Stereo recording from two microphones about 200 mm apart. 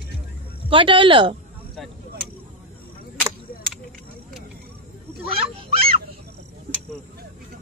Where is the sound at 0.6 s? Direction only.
25° right (ahead or behind).